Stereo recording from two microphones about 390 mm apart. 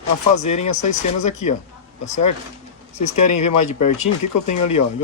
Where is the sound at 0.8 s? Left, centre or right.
Centre.